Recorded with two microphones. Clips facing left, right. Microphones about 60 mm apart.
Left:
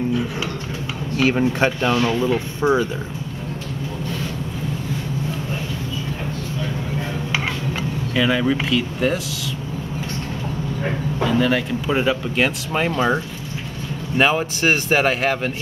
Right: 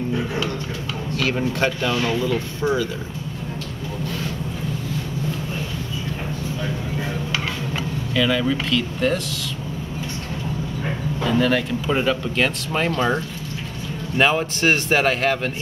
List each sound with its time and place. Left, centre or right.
1.1 s speech: centre
8.1 s speech: centre
11.2 s speech: centre